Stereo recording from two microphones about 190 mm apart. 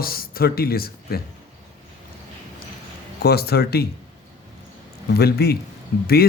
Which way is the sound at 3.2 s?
55° left (ahead or behind).